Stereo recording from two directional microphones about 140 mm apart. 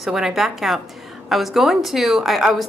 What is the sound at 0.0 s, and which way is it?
Speech, centre (ahead or behind).